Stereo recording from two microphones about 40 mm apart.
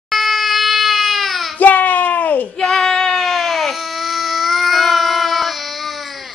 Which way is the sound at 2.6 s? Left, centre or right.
Centre.